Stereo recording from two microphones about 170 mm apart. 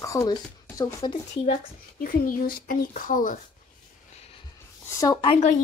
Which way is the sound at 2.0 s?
55° left (ahead or behind).